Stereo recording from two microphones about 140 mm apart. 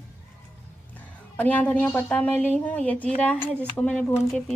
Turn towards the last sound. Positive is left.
turn(degrees=5)  # may be behind; listen again after turning